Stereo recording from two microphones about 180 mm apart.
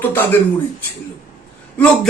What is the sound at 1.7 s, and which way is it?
Speech, 5° left (ahead or behind).